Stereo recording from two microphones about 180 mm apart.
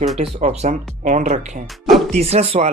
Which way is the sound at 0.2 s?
35° right (ahead or behind).